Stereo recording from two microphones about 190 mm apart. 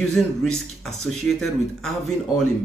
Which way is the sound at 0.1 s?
Centre (ahead or behind).